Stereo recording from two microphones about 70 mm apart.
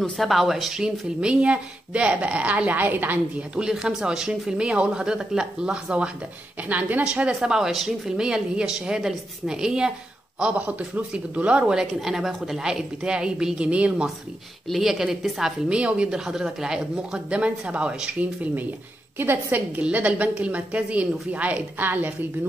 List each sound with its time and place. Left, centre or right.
0.2 s a woman's voice: centre; by 3.4 s right
3.5 s a woman's voice: centre
14.7 s a woman's voice: centre
15.7 s a woman's voice: centre